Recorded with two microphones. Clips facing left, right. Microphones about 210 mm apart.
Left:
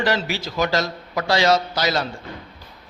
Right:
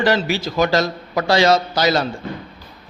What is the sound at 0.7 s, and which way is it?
A man's voice, 55° right (ahead or behind).